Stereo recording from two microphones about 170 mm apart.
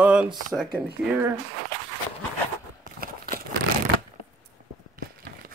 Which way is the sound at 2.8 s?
60° right (ahead or behind).